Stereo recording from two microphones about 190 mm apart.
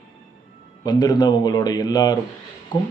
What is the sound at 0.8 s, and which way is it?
Speech, 20° left (ahead or behind).